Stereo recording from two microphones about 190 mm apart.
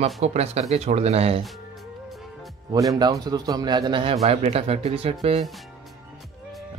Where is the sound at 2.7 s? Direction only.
20° right (ahead or behind).